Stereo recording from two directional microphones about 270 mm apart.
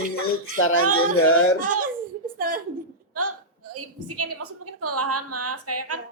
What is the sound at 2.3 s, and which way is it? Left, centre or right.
Speech, right.